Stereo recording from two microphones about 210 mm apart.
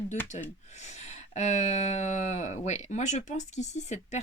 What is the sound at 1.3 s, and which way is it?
Speech, 35° left (ahead or behind).